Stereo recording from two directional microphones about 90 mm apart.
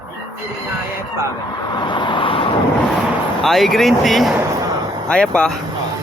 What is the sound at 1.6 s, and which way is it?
Vehicle, 55° left (ahead or behind).